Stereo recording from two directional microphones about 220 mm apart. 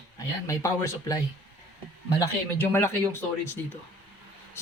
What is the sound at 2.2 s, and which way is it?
Speech, 10° left (ahead or behind).